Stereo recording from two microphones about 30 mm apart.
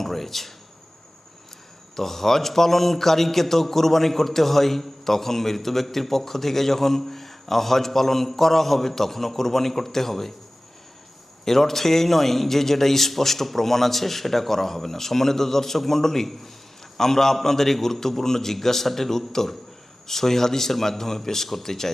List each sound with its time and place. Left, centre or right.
0.0 s speech: centre
2.0 s a man's voice: centre
11.4 s a man's voice: centre